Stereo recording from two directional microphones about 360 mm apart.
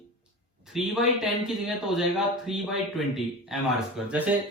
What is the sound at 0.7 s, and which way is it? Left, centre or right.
A man's voice, centre.